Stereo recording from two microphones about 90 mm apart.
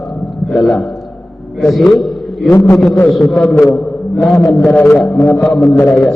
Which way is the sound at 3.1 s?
5° left (ahead or behind).